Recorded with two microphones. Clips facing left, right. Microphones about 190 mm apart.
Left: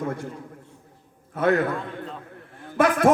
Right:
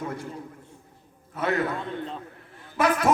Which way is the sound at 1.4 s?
50° left (ahead or behind).